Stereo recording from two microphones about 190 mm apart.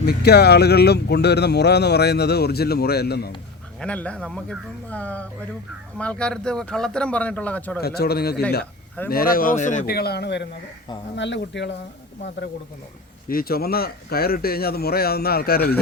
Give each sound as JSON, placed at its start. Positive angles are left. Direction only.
{"t": 0.0, "sound": "speech", "side_deg": 60}
{"t": 3.8, "sound": "speech", "side_deg": 5}
{"t": 7.8, "sound": "a man's voice", "side_deg": 55}
{"t": 13.2, "sound": "a man's voice", "side_deg": 50}